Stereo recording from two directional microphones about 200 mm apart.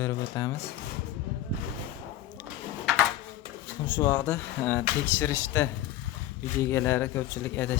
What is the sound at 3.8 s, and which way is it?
Speech, 20° left (ahead or behind).